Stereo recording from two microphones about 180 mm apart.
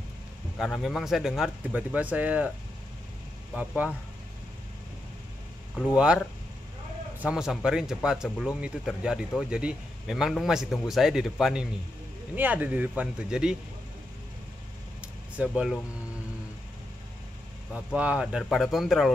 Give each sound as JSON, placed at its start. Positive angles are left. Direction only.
{"t": 0.6, "sound": "speech", "side_deg": 0}
{"t": 3.5, "sound": "speech", "side_deg": -10}
{"t": 5.9, "sound": "speech", "side_deg": -5}
{"t": 15.0, "sound": "a sound", "side_deg": -5}
{"t": 17.7, "sound": "speech", "side_deg": -5}